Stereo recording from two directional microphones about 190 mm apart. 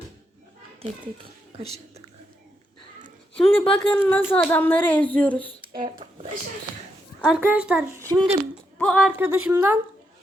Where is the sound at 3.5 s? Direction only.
5° left (ahead or behind).